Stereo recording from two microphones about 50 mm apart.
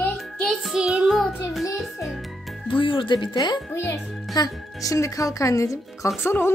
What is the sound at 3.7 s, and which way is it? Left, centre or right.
Speech, left.